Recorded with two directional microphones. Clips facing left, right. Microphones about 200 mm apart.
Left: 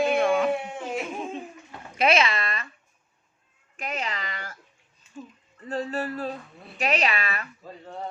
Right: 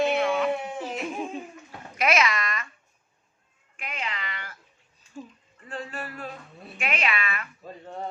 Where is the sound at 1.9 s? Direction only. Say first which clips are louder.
Left 2 dB; 30° left (ahead or behind).